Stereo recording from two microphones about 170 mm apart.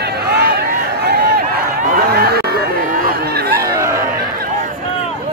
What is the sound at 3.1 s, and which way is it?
Chatter, 60° right (ahead or behind).